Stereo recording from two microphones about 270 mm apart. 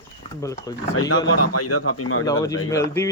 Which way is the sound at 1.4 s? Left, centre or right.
Left.